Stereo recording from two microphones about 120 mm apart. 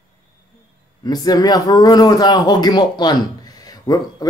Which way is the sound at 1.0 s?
35° left (ahead or behind).